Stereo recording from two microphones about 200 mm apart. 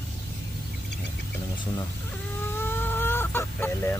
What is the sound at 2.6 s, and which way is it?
Chicken, 10° left (ahead or behind).